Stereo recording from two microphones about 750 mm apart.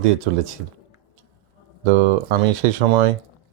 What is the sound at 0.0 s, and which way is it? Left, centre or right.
Speech, right.